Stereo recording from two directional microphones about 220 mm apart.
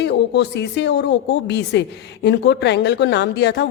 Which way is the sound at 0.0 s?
50° left (ahead or behind).